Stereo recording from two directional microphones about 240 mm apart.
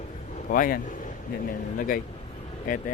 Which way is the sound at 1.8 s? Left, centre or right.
Left.